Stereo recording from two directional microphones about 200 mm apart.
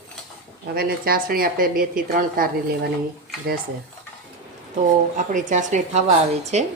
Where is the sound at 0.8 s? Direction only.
50° right (ahead or behind).